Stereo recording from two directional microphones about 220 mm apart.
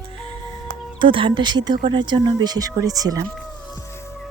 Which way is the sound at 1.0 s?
25° right (ahead or behind).